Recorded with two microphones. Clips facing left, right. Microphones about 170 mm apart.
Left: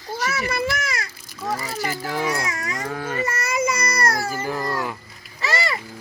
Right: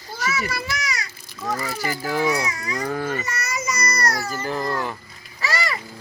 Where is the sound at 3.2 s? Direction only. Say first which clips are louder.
Left 6 dB; 55° left (ahead or behind).